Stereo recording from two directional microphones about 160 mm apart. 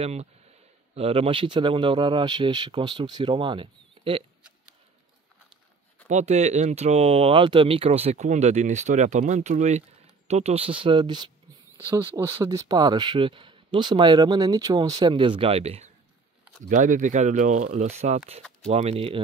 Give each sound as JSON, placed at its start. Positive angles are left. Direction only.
{"t": 0.0, "sound": "speech", "side_deg": -40}
{"t": 6.0, "sound": "speech", "side_deg": -45}
{"t": 11.9, "sound": "speech", "side_deg": -15}
{"t": 16.6, "sound": "speech", "side_deg": -55}